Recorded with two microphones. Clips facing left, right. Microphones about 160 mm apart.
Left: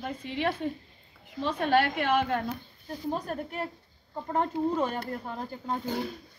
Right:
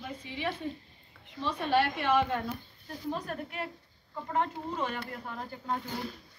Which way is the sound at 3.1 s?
40° left (ahead or behind).